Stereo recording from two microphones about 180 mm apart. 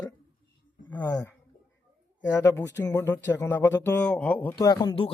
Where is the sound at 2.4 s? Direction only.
20° left (ahead or behind).